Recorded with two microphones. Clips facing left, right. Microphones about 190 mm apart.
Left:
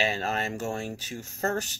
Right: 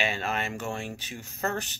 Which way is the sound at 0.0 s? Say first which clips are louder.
Left 2 dB; 40° left (ahead or behind).